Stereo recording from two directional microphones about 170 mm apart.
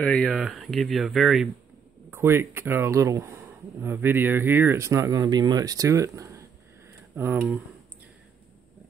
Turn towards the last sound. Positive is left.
turn(degrees=-10)  # may be behind; listen again after turning